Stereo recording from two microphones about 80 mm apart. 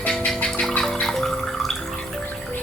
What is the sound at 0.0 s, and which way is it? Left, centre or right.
Music, centre.